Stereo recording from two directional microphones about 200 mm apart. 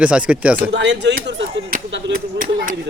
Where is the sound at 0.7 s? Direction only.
60° right (ahead or behind).